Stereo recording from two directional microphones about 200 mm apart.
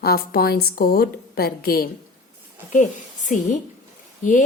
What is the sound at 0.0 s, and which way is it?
A woman's voice, 50° left (ahead or behind).